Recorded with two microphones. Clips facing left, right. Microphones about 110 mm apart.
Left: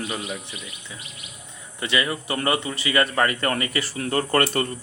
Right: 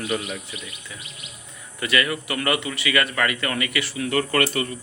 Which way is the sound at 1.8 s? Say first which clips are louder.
Right 1 dB; 25° left (ahead or behind).